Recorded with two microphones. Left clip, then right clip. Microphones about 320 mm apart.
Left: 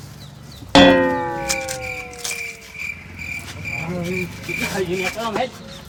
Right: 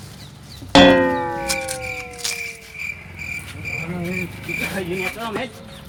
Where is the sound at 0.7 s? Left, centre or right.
Centre.